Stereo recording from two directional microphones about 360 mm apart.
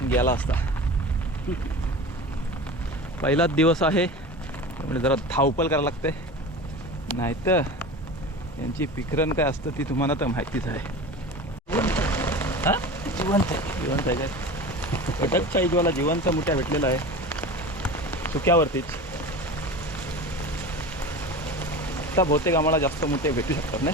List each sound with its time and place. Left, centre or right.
0.1 s speech: centre
3.2 s speech: centre
11.7 s a sound: centre